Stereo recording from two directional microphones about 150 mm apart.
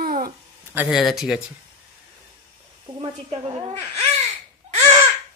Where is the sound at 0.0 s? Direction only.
75° right (ahead or behind).